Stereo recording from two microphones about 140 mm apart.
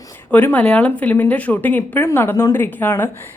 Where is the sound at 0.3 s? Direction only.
10° left (ahead or behind).